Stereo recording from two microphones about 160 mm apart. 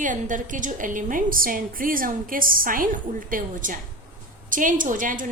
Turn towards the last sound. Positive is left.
turn(degrees=-55)  # may be behind; listen again after turning